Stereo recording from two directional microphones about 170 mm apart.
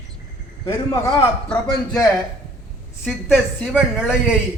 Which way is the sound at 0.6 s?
20° left (ahead or behind).